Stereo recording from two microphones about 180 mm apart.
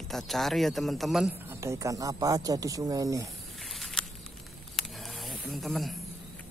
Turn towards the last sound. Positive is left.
turn(degrees=0)  # may be behind; listen again after turning